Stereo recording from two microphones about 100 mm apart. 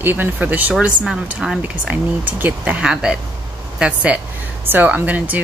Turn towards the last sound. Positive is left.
turn(degrees=-15)  # may be behind; listen again after turning